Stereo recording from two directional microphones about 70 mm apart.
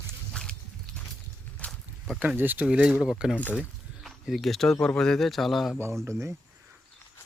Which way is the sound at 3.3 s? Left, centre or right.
Left.